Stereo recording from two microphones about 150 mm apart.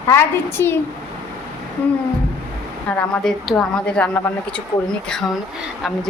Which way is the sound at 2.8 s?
10° left (ahead or behind).